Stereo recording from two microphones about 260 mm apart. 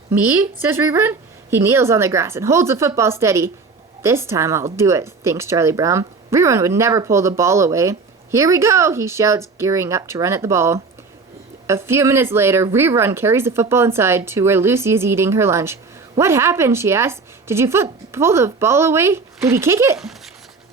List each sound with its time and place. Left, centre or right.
0.1 s speech: centre